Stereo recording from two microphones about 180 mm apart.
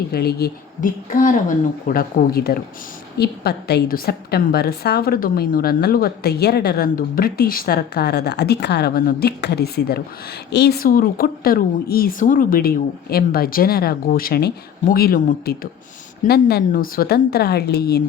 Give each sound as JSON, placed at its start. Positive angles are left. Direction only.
{"t": 0.1, "sound": "a woman's voice", "side_deg": 60}